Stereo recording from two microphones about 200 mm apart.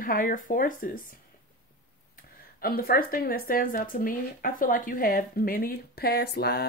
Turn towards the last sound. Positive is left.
turn(degrees=55)  # may be behind; listen again after turning